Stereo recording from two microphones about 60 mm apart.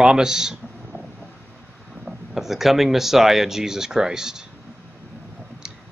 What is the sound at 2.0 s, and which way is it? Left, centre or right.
Speech, centre.